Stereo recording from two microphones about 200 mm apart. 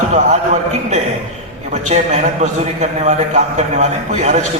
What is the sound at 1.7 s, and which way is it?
A man's voice, 35° right (ahead or behind).